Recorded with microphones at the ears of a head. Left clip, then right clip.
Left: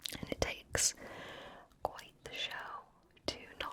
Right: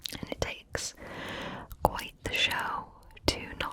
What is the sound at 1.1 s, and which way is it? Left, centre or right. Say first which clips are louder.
Whispering: right 10 dB; right.